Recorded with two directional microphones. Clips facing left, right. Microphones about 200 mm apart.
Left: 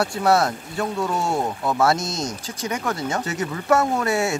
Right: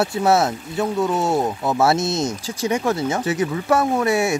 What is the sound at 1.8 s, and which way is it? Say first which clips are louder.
Speech: right 3 dB; 25° right (ahead or behind).